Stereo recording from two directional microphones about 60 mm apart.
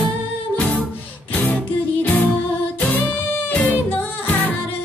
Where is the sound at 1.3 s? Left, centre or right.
Left.